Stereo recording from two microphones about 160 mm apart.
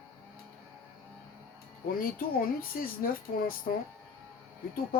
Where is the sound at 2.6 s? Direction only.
65° left (ahead or behind).